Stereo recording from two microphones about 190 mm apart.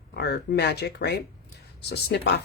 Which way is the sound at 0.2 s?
60° left (ahead or behind).